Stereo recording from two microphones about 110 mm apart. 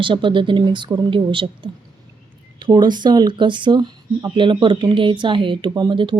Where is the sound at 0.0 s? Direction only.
50° right (ahead or behind).